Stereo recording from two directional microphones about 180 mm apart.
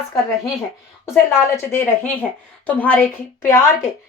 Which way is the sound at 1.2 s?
15° left (ahead or behind).